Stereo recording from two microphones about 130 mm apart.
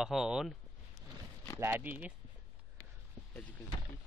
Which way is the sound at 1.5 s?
20° right (ahead or behind).